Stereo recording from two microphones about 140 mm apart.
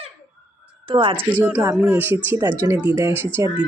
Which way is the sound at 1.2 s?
10° right (ahead or behind).